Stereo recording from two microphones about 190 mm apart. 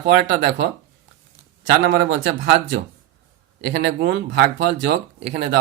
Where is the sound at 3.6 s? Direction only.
60° right (ahead or behind).